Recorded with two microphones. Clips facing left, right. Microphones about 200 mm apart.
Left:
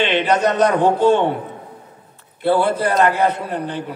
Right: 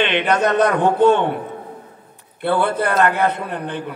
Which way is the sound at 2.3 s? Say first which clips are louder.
Left 2 dB; 60° right (ahead or behind).